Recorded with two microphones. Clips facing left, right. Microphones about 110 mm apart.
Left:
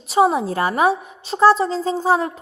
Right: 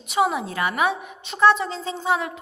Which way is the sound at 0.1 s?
35° left (ahead or behind).